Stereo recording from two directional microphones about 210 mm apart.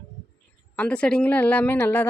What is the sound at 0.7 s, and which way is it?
Speech, 5° left (ahead or behind).